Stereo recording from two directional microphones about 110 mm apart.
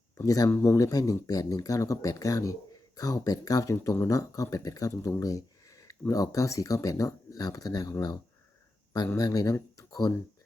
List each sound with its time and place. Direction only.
0.2 s speech: 35° left (ahead or behind)